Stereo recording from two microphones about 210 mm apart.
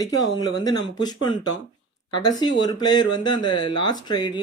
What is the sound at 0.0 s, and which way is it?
Speech, 20° left (ahead or behind).